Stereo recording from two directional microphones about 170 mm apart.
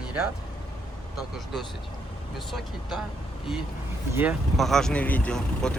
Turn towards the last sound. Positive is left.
turn(degrees=5)  # may be behind; listen again after turning